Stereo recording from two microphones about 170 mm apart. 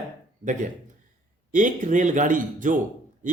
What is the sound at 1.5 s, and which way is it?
Speech, 50° right (ahead or behind).